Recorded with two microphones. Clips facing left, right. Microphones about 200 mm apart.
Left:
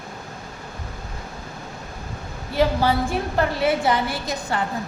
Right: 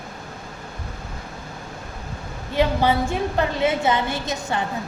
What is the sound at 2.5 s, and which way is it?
A woman's voice, 20° right (ahead or behind).